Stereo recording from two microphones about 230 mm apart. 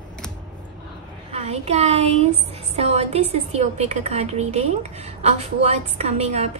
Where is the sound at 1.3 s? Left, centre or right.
Right.